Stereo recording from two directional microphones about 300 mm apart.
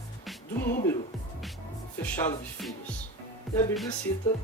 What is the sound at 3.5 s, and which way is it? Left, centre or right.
Speech, centre.